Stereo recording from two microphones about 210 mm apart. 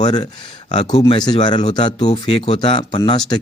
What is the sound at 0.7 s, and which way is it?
Speech, 35° left (ahead or behind).